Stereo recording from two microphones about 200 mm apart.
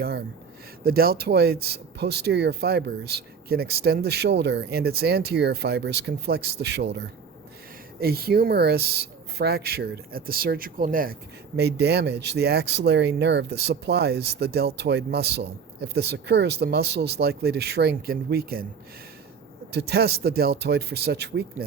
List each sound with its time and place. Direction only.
0.0 s speech: 50° right (ahead or behind)
8.0 s speech: 50° right (ahead or behind)
19.7 s speech: 55° right (ahead or behind)